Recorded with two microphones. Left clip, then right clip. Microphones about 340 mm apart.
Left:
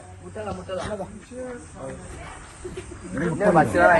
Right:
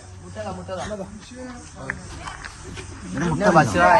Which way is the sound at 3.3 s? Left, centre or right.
Right.